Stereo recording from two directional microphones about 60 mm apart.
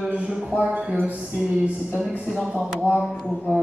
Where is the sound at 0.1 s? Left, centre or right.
Centre.